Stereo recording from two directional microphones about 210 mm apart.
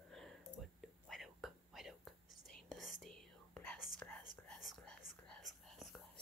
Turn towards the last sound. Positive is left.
turn(degrees=0)  # may be behind; listen again after turning